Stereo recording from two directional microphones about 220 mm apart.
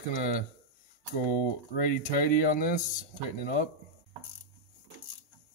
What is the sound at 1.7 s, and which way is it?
Speech, 40° left (ahead or behind).